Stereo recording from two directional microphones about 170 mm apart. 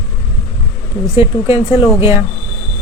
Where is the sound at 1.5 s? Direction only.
15° right (ahead or behind).